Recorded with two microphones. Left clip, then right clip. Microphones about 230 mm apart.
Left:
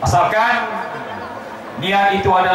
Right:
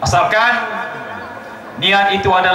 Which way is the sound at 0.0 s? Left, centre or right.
Centre.